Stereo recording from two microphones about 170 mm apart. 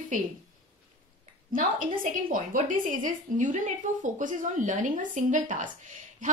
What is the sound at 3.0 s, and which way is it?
A woman's voice, 50° right (ahead or behind).